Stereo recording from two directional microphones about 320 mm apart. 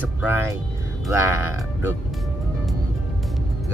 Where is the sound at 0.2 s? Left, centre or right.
Centre.